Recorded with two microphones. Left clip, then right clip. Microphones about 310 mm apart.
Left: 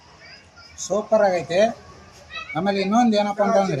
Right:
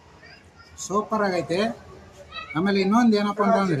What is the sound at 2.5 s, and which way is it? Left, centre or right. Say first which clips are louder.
Speech: left 1 dB; right.